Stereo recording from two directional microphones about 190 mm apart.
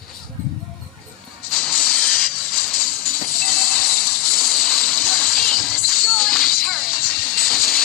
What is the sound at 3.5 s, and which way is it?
Water, 5° left (ahead or behind).